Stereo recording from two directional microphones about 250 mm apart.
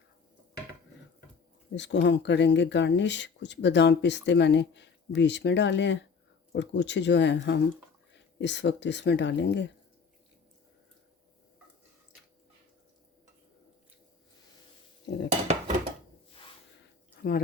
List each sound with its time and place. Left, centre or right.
1.7 s speech: left
15.4 s dishes: right
17.2 s drip: left